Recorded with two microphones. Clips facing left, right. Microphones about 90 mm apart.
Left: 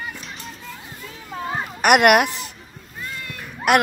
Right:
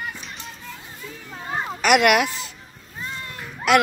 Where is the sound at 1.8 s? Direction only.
50° left (ahead or behind).